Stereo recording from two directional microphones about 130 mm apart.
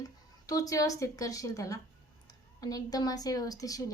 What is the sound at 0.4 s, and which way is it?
A woman's voice, 25° left (ahead or behind).